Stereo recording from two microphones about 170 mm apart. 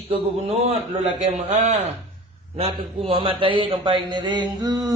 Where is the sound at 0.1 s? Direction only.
35° right (ahead or behind).